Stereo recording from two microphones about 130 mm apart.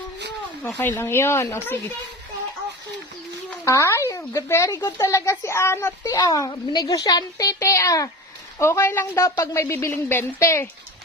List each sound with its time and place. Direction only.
0.8 s a child's voice: 15° left (ahead or behind)
3.6 s a child's voice: 25° left (ahead or behind)